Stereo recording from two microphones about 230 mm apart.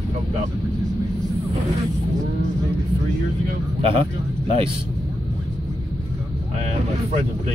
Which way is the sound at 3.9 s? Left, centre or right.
Right.